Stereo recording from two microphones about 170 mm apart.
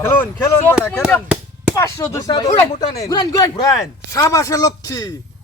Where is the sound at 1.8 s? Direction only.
20° left (ahead or behind).